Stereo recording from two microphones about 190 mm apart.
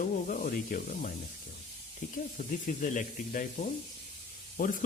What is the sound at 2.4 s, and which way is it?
Speech, 45° left (ahead or behind).